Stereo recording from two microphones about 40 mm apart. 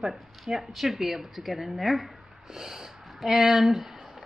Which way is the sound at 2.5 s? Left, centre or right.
Centre.